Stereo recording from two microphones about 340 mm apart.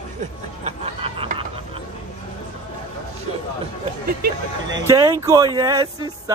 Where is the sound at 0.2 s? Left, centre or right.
Centre.